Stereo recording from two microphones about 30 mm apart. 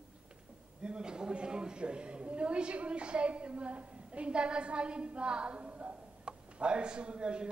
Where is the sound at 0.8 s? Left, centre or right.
Right.